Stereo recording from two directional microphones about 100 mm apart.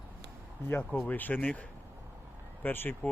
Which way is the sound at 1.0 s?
20° left (ahead or behind).